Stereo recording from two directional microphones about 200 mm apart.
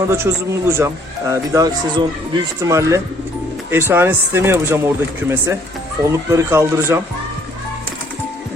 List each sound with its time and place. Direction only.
0.1 s speech: 15° right (ahead or behind)